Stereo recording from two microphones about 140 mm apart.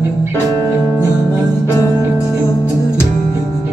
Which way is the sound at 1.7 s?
20° left (ahead or behind).